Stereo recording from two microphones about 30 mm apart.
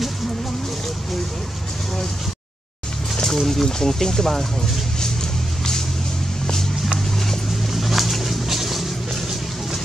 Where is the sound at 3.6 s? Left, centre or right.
Centre.